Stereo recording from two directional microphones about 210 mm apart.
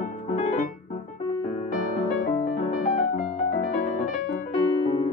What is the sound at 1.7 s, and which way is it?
Music, 40° left (ahead or behind).